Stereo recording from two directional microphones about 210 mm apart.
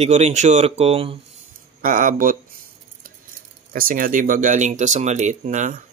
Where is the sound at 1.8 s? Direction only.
40° right (ahead or behind).